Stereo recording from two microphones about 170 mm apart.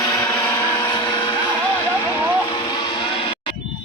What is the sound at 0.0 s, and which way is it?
Vehicle, 20° left (ahead or behind).